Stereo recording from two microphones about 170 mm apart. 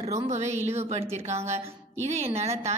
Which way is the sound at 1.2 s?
15° right (ahead or behind).